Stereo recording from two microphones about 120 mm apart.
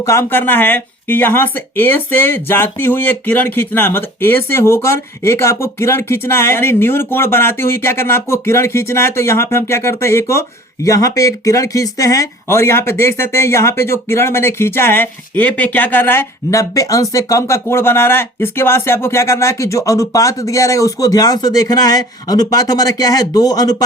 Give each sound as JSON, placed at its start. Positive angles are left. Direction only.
{"t": 0.0, "sound": "speech", "side_deg": 25}